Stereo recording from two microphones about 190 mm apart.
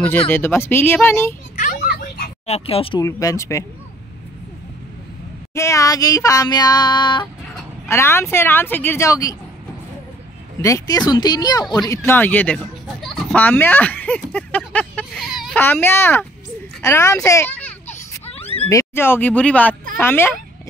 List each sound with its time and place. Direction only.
0.3 s speech: 10° left (ahead or behind)
1.6 s children playing: 45° left (ahead or behind)
2.4 s speech: 30° left (ahead or behind)
3.1 s speech: 15° left (ahead or behind)
5.5 s child singing: 15° left (ahead or behind)
7.9 s speech: 15° left (ahead or behind)
10.6 s child singing: 20° left (ahead or behind)
11.7 s speech: 20° left (ahead or behind); by 15.6 s centre (ahead or behind)
15.6 s speech: 10° left (ahead or behind)
17.8 s a sound: 30° left (ahead or behind)
18.6 s speech: 15° left (ahead or behind)